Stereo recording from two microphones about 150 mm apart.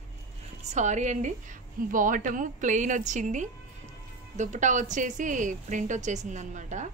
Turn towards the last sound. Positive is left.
turn(degrees=-55)  # may be behind; listen again after turning